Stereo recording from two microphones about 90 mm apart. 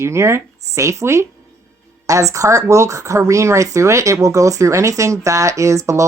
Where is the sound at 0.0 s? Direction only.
30° right (ahead or behind).